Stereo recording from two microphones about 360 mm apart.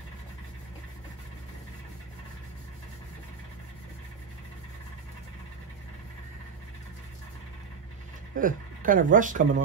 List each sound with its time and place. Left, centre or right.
8.4 s speech: right